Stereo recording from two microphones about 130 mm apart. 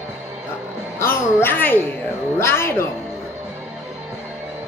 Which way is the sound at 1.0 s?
20° left (ahead or behind).